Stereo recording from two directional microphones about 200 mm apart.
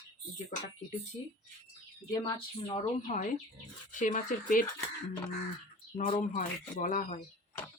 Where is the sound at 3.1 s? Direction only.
40° left (ahead or behind).